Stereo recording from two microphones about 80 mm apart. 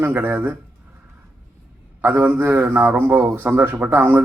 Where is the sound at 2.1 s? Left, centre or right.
Right.